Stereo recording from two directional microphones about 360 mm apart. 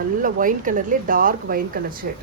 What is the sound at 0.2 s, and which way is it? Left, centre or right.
Speech, right.